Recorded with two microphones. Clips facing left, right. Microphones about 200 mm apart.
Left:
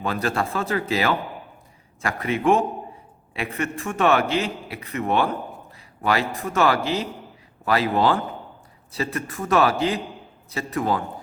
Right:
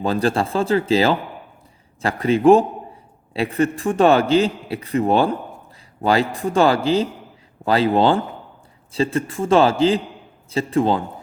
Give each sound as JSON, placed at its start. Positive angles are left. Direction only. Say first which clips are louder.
{"t": 0.0, "sound": "a man's voice", "louder": "right 5 dB", "side_deg": -30}